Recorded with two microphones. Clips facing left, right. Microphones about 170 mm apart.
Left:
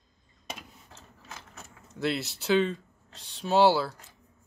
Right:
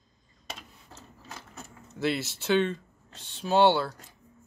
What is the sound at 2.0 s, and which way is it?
Speech, centre (ahead or behind).